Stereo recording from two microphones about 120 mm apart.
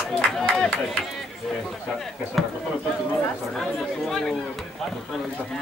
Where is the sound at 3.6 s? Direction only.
Centre (ahead or behind).